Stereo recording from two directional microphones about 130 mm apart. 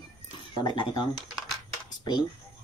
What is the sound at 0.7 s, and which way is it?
Speech, 35° left (ahead or behind).